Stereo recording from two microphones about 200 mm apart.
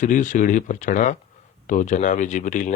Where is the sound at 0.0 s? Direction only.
40° left (ahead or behind).